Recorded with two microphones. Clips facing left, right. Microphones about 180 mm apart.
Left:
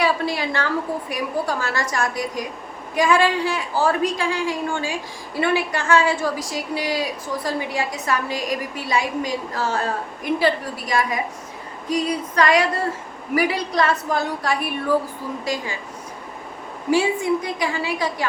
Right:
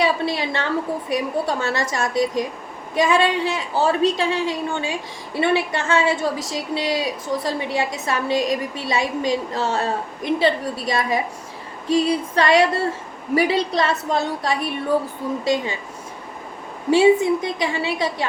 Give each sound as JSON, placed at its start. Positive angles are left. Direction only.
{"t": 0.0, "sound": "a woman's voice", "side_deg": -25}
{"t": 16.9, "sound": "a woman's voice", "side_deg": -25}